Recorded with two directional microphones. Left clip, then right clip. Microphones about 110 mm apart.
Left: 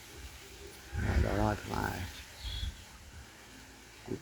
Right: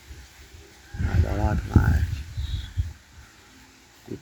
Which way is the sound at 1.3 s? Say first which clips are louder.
Right 7 dB; 30° right (ahead or behind).